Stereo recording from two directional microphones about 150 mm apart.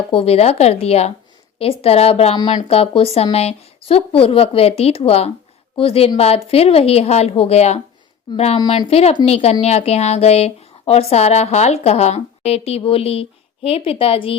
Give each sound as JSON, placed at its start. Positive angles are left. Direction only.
{"t": 0.1, "sound": "speech", "side_deg": 40}
{"t": 2.4, "sound": "speech", "side_deg": 25}
{"t": 2.6, "sound": "speech", "side_deg": 40}
{"t": 8.5, "sound": "speech", "side_deg": 30}